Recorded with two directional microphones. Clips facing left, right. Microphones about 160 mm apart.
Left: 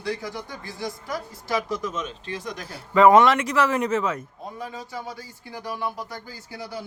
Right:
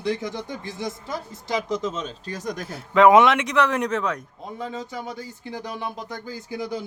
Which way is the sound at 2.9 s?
Centre (ahead or behind).